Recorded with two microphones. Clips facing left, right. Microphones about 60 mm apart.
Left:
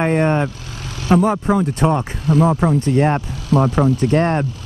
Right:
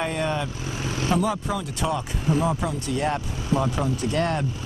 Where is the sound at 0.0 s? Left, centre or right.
Left.